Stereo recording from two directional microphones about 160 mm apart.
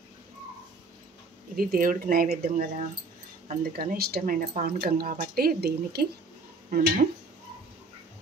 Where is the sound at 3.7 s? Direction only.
70° right (ahead or behind).